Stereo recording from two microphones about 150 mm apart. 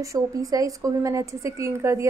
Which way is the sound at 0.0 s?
20° right (ahead or behind).